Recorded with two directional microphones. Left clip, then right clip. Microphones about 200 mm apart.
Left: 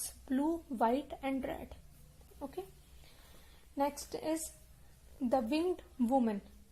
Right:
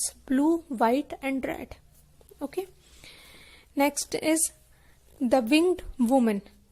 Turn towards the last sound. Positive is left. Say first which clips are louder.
# right 8 dB
turn(degrees=-35)  # may be behind; listen again after turning